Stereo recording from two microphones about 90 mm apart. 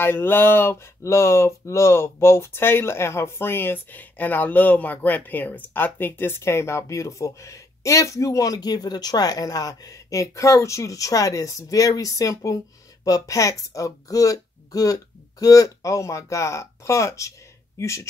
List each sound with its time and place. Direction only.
0.0 s speech: 25° left (ahead or behind)